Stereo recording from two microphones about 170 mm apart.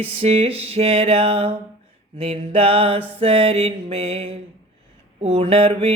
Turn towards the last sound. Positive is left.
turn(degrees=-35)  # may be behind; listen again after turning